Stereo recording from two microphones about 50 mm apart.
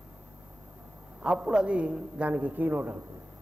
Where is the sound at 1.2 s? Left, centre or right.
Centre; by 2.9 s right.